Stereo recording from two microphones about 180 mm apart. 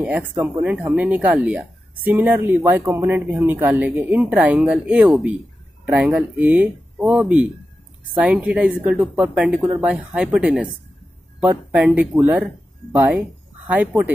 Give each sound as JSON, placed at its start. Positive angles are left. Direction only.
{"t": 0.0, "sound": "speech", "side_deg": -10}